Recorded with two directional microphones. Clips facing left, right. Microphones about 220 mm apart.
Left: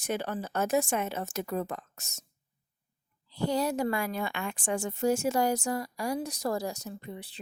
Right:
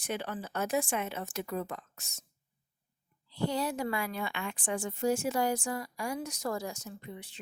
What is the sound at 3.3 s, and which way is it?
Speech, 40° left (ahead or behind).